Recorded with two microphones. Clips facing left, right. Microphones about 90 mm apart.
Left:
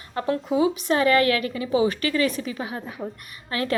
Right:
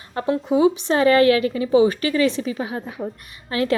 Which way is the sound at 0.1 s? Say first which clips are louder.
Right 3 dB; 20° right (ahead or behind).